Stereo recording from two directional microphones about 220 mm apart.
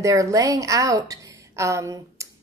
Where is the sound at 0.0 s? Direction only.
15° right (ahead or behind).